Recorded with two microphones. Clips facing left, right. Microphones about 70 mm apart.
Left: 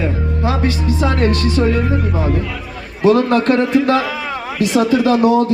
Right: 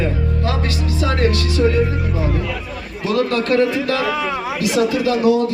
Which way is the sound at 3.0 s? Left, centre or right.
Left.